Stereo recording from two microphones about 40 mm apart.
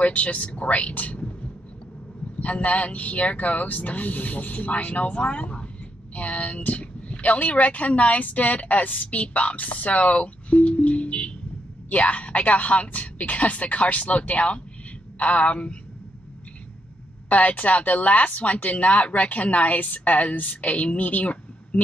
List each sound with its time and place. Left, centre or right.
0.1 s speech: left
2.4 s a woman's voice: left
17.3 s speech: left